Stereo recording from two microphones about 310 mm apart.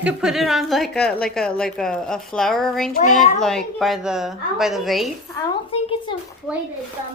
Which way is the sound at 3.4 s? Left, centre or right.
Centre.